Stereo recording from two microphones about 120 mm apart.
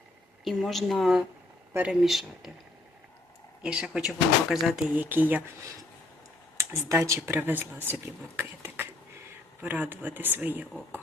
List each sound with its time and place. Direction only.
0.4 s speech: centre (ahead or behind)
1.7 s speech: 10° right (ahead or behind)
2.0 s speech: centre (ahead or behind)
3.6 s speech: 5° right (ahead or behind)
4.9 s speech: 15° right (ahead or behind)
6.6 s speech: 20° right (ahead or behind)